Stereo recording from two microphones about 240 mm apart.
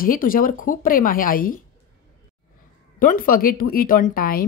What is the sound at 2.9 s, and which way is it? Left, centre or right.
Speech, left.